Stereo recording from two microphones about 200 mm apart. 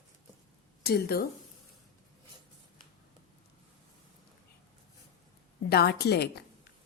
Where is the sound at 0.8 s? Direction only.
50° left (ahead or behind).